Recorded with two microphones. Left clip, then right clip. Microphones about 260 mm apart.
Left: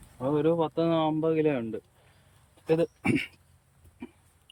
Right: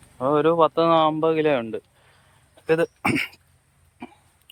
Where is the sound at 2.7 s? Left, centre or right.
Centre.